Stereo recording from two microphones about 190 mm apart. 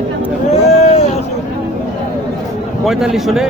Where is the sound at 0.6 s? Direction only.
35° left (ahead or behind).